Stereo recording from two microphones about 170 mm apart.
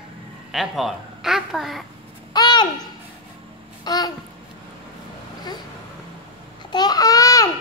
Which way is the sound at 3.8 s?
25° left (ahead or behind).